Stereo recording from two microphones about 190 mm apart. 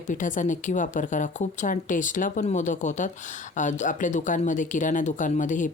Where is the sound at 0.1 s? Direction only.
45° left (ahead or behind).